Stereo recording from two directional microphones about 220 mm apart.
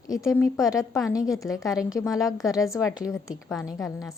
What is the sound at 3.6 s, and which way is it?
Speech, 15° left (ahead or behind).